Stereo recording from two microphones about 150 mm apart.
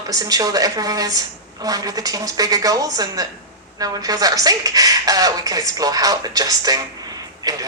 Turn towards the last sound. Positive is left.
turn(degrees=-25)  # may be behind; listen again after turning